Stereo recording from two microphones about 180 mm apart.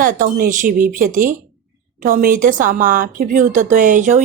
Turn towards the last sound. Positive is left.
turn(degrees=-45)  # may be behind; listen again after turning